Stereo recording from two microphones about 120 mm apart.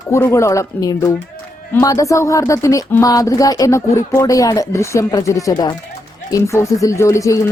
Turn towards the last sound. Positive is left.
turn(degrees=25)  # may be behind; listen again after turning